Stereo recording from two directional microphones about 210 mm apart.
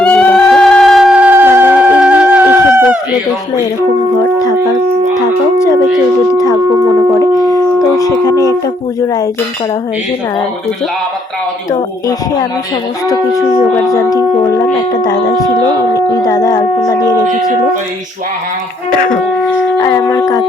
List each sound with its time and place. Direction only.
0.0 s a sound: 5° left (ahead or behind)
4.2 s howl: 20° left (ahead or behind)
6.3 s a sound: 15° left (ahead or behind)
8.2 s speech: 15° left (ahead or behind)
11.7 s speech: 15° left (ahead or behind)
13.8 s a sound: 15° left (ahead or behind)
15.0 s speech: 20° left (ahead or behind)
18.9 s speech: 40° left (ahead or behind)
19.8 s shofar: 15° left (ahead or behind)